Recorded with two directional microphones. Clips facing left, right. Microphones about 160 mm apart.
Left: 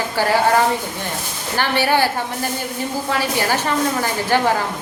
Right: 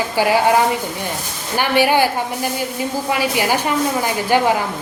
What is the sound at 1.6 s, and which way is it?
Speech, 15° right (ahead or behind).